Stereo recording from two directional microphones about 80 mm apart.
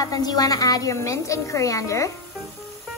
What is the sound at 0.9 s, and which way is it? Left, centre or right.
A woman's voice, left.